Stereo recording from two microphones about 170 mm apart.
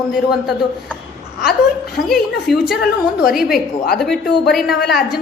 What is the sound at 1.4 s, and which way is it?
Speech, 65° left (ahead or behind).